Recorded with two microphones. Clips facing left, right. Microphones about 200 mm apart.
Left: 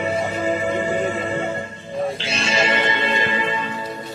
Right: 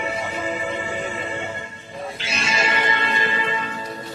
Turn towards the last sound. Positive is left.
turn(degrees=20)  # may be behind; listen again after turning